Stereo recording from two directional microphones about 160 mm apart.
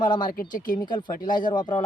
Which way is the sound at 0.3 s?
60° left (ahead or behind).